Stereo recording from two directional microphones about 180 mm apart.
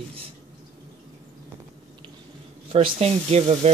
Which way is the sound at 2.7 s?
35° right (ahead or behind).